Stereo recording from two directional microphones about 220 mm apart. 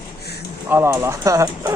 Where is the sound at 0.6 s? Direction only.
10° right (ahead or behind).